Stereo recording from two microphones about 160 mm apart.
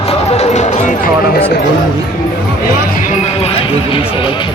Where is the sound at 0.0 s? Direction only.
40° left (ahead or behind).